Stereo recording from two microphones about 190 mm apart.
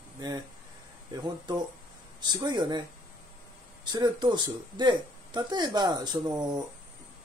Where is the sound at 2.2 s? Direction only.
20° right (ahead or behind).